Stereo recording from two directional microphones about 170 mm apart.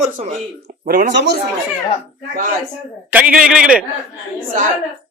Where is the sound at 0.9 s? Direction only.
55° right (ahead or behind).